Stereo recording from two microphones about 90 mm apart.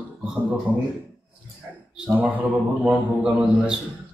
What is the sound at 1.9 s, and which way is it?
Speech, 10° right (ahead or behind).